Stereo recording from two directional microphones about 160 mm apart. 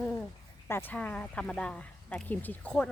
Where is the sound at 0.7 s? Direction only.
15° left (ahead or behind).